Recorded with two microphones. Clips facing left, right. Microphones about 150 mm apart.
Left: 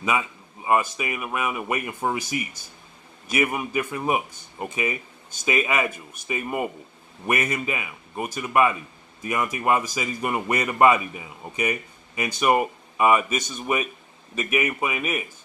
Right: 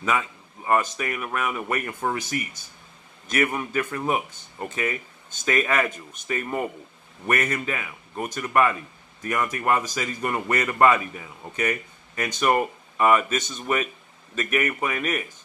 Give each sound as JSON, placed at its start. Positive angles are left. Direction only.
{"t": 0.0, "sound": "a man's voice", "side_deg": 10}